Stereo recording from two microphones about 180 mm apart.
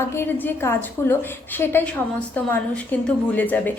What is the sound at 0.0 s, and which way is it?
A woman's voice, 15° left (ahead or behind).